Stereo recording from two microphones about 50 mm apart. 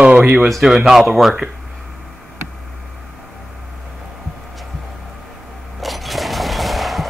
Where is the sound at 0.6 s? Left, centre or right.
Centre.